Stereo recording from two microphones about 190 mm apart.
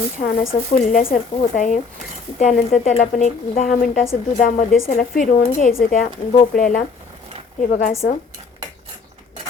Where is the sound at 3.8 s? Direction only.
50° left (ahead or behind).